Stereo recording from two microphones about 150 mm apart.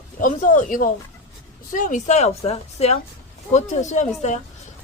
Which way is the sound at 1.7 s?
60° left (ahead or behind).